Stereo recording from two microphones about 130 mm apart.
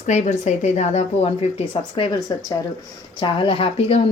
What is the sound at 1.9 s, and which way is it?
Speech, 30° left (ahead or behind).